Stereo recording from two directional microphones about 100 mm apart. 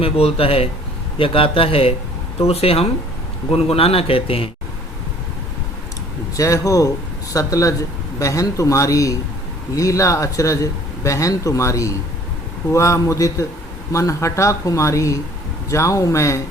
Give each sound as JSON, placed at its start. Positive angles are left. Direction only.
{"t": 0.0, "sound": "speech", "side_deg": 70}
{"t": 2.5, "sound": "speech", "side_deg": 80}
{"t": 6.3, "sound": "speech", "side_deg": 30}